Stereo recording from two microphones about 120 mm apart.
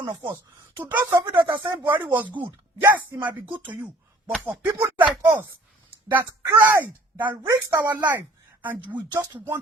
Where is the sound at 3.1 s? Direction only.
15° right (ahead or behind).